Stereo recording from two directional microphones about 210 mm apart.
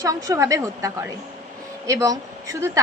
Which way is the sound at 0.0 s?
15° right (ahead or behind).